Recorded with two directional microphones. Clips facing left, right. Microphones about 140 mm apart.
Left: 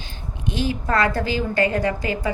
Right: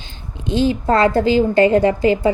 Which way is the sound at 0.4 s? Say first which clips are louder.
Right 8 dB; 25° right (ahead or behind).